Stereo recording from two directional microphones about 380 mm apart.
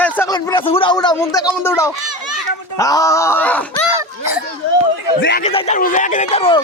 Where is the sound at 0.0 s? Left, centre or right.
Centre.